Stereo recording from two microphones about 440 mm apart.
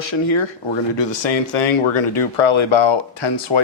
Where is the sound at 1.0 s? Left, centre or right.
Left.